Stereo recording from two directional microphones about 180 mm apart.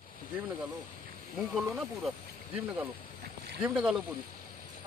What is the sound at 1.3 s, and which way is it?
Speech, centre (ahead or behind).